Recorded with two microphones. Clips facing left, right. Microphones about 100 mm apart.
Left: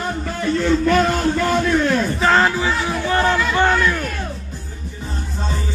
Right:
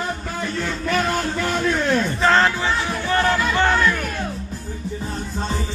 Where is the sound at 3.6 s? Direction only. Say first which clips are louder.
Left 2 dB; 15° left (ahead or behind).